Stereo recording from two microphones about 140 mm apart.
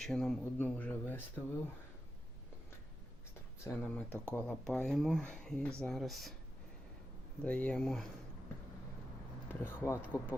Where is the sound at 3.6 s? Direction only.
20° left (ahead or behind).